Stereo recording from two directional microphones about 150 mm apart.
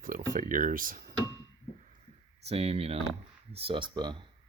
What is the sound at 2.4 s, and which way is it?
Speech, 40° right (ahead or behind).